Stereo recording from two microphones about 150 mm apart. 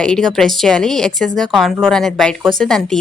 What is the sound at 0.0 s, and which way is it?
A woman's voice, 5° left (ahead or behind).